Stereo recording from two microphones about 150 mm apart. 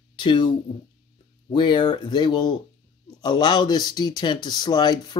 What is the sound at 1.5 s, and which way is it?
Speech, 30° left (ahead or behind).